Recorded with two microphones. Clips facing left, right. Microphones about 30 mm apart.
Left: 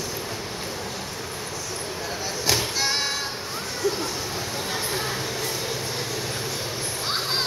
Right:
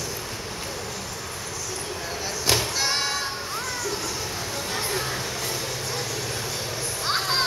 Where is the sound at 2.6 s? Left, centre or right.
Centre.